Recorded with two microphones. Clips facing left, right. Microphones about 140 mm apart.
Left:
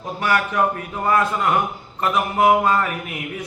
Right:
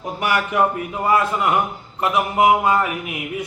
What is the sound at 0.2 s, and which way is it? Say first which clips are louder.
Mantra: even; 15° right (ahead or behind).